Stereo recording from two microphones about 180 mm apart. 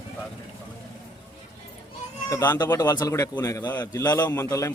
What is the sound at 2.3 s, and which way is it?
A man's voice, 20° left (ahead or behind).